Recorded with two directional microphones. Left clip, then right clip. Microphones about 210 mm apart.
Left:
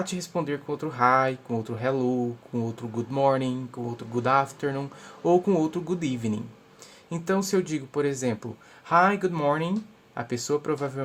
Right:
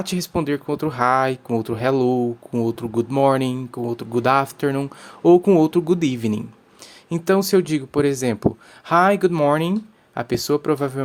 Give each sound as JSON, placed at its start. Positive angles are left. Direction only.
{"t": 0.0, "sound": "speech", "side_deg": -35}